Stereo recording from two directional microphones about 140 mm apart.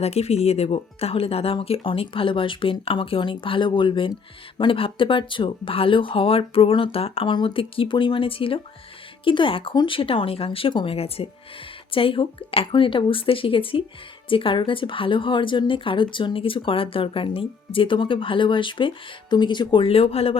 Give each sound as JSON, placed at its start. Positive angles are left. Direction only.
{"t": 0.0, "sound": "a woman's voice", "side_deg": 50}